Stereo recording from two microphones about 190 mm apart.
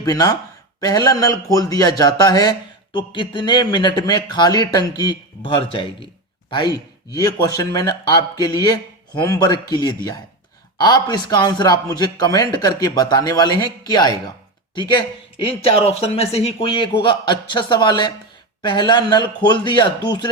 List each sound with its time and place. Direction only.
0.0 s a man's voice: 20° left (ahead or behind)
15.4 s a man's voice: 30° left (ahead or behind)